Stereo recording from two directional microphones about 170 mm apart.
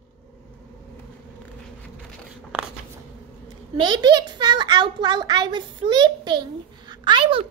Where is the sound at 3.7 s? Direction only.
25° right (ahead or behind).